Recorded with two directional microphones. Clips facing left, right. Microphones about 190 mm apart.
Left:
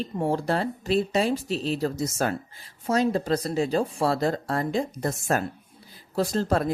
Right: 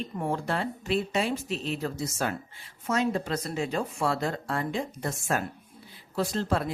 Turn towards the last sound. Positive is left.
turn(degrees=40)  # may be behind; listen again after turning